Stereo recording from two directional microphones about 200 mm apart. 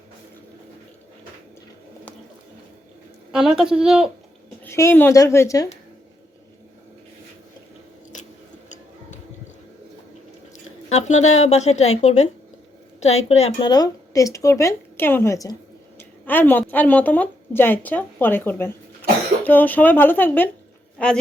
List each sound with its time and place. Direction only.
3.3 s a child's voice: centre (ahead or behind)
4.6 s a woman's voice: 10° left (ahead or behind)
10.8 s a sound: 35° left (ahead or behind)
11.3 s a woman's voice: 35° left (ahead or behind)
13.7 s a woman's voice: 20° left (ahead or behind)